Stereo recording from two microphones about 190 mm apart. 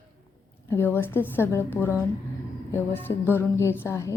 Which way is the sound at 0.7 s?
10° left (ahead or behind).